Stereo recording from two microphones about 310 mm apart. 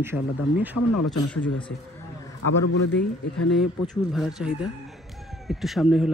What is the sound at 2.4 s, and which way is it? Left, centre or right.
Speech, left.